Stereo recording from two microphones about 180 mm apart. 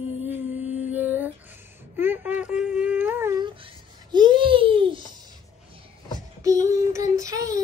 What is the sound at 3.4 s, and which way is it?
Babbling, 25° right (ahead or behind).